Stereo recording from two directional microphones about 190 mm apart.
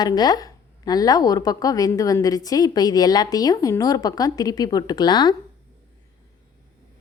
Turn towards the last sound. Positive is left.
turn(degrees=20)  # may be behind; listen again after turning